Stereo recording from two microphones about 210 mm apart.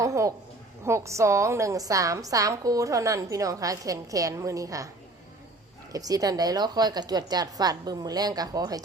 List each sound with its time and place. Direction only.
0.0 s a woman's voice: 15° right (ahead or behind)
5.9 s a woman's voice: 15° right (ahead or behind)